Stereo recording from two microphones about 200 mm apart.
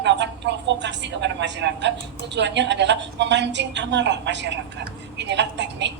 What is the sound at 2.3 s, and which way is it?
A woman's voice, 60° right (ahead or behind).